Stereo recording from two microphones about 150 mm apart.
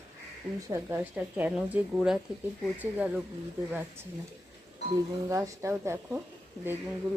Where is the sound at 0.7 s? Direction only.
15° right (ahead or behind).